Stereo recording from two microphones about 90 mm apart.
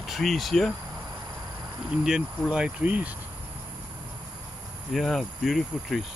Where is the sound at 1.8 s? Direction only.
5° right (ahead or behind).